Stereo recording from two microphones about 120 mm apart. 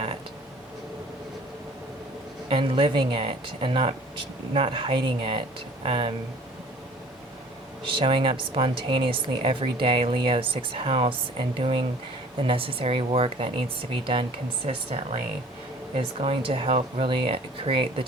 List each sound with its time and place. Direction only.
2.5 s speech: 45° right (ahead or behind)
7.9 s speech: 45° right (ahead or behind)